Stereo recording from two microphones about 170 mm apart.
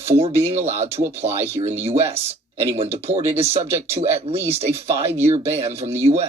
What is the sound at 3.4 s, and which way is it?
Speech, 35° right (ahead or behind).